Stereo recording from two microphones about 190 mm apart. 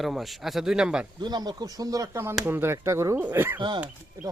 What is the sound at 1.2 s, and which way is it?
Speech, 20° right (ahead or behind).